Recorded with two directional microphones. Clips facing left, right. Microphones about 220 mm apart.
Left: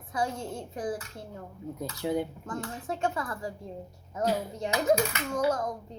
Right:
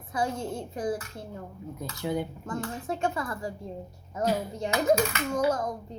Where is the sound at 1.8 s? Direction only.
30° left (ahead or behind).